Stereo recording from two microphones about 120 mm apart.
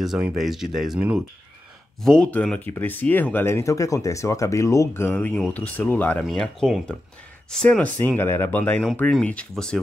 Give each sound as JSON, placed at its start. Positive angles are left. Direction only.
{"t": 0.0, "sound": "speech", "side_deg": -5}
{"t": 2.0, "sound": "speech", "side_deg": 5}